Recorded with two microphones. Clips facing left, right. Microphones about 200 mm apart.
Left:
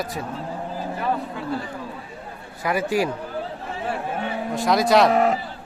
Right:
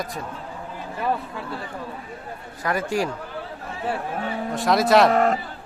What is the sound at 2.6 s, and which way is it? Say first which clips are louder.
Speech: left 2 dB; 10° left (ahead or behind).